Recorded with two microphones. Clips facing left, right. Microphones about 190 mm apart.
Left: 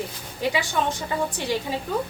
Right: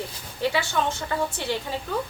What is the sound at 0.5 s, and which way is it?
A woman's voice, 15° left (ahead or behind).